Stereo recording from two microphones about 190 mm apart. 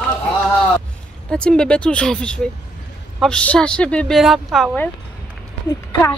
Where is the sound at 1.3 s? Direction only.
5° left (ahead or behind).